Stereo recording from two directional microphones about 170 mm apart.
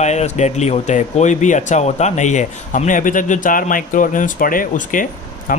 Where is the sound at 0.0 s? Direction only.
40° left (ahead or behind).